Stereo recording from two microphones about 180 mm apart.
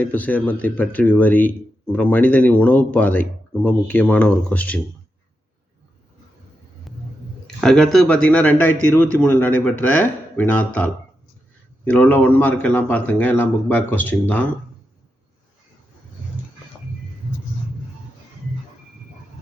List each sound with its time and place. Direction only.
0.0 s speech: 10° left (ahead or behind)
6.9 s a sound: centre (ahead or behind)
7.4 s speech: 5° left (ahead or behind)
11.9 s speech: 10° left (ahead or behind)